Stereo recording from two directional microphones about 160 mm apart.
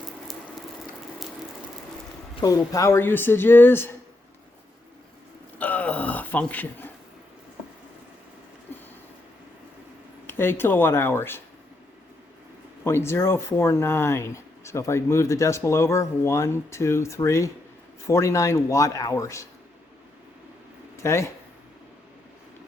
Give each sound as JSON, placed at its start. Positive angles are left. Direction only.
{"t": 2.4, "sound": "speech", "side_deg": 20}
{"t": 5.5, "sound": "a sound", "side_deg": 10}
{"t": 10.2, "sound": "speech", "side_deg": 15}
{"t": 12.8, "sound": "a man's voice", "side_deg": 15}
{"t": 20.9, "sound": "speech", "side_deg": 20}